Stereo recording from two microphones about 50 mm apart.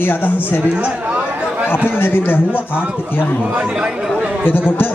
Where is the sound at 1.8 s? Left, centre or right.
Left.